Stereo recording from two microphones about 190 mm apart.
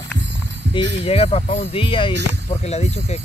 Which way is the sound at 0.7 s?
30° left (ahead or behind).